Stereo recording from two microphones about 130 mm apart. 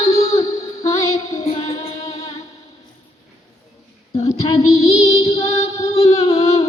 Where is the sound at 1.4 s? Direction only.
50° left (ahead or behind).